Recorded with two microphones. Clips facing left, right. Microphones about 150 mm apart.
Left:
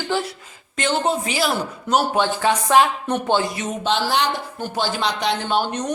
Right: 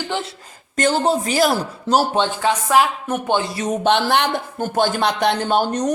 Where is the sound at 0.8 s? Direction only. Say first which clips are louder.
Right 3 dB; 40° right (ahead or behind).